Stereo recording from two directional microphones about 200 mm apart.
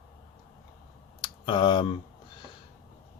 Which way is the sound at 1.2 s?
25° left (ahead or behind).